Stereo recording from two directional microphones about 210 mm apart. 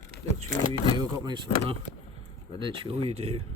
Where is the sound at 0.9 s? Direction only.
20° right (ahead or behind).